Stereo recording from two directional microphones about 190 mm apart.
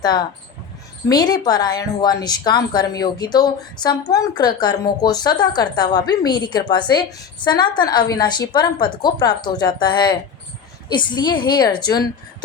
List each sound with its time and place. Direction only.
0.0 s a woman's voice: 20° left (ahead or behind)